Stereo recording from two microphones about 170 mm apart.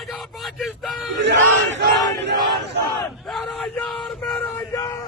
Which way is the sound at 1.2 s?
90° right.